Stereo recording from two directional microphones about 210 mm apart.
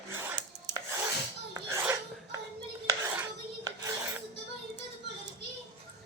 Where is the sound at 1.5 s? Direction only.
15° right (ahead or behind).